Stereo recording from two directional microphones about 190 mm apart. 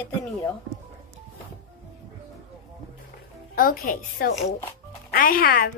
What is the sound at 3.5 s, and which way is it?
A woman's voice, 50° left (ahead or behind).